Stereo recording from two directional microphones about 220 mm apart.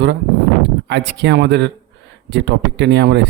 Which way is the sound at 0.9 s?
50° right (ahead or behind).